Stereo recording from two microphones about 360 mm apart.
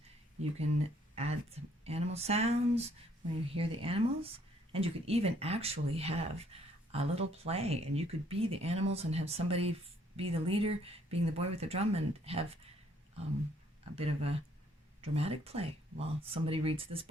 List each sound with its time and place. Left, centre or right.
1.1 s speech: centre
13.9 s speech: centre